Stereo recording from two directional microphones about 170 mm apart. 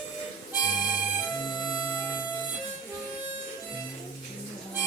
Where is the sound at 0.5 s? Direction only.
25° left (ahead or behind).